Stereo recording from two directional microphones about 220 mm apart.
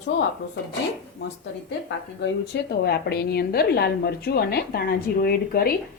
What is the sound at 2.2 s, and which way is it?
A woman's voice, 50° left (ahead or behind).